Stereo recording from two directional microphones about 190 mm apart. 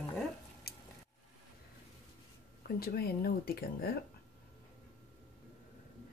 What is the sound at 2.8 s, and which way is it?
Speech, 55° left (ahead or behind).